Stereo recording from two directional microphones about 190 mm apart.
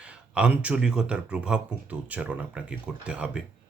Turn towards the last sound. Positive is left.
turn(degrees=-5)  # may be behind; listen again after turning